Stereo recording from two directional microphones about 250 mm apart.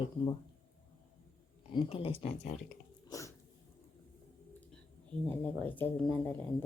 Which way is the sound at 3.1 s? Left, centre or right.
Centre.